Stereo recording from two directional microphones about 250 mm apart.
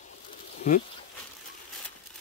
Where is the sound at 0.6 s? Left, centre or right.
Left.